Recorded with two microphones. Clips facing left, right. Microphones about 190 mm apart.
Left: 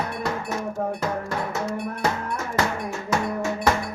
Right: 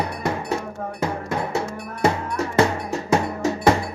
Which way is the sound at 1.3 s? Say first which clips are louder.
Right 2 dB; 25° right (ahead or behind).